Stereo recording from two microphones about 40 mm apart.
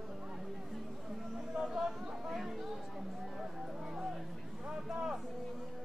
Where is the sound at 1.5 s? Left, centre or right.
Centre.